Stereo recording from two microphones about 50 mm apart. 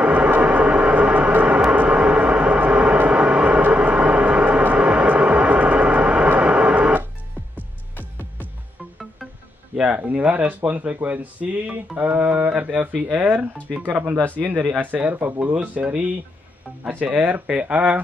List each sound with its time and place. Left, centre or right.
0.0 s music: right
1.7 s vehicle: right
9.8 s speech: right
11.4 s music: centre
12.0 s speech: right
17.0 s speech: right